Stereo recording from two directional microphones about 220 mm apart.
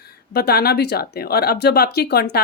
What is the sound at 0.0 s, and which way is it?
Speech, 45° left (ahead or behind).